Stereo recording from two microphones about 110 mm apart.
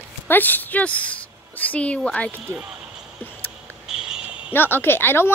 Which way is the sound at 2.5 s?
10° right (ahead or behind).